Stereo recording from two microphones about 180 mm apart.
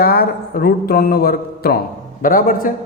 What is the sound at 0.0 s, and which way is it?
A man's voice, 55° left (ahead or behind).